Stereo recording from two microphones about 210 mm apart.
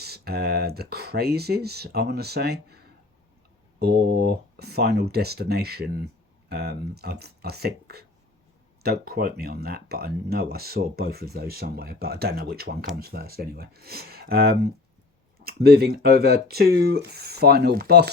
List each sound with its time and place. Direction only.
0.0 s speech: 50° right (ahead or behind)